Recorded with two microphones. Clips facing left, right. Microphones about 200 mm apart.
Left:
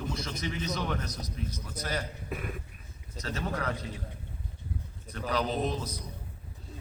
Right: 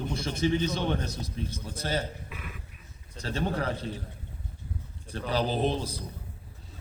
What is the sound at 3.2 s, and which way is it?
Speech, 30° right (ahead or behind).